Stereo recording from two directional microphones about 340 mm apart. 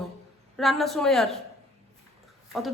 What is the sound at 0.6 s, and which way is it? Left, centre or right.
Speech, centre.